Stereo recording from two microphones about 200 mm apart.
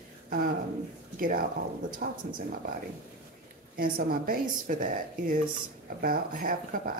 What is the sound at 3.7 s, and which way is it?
Speech, 50° right (ahead or behind).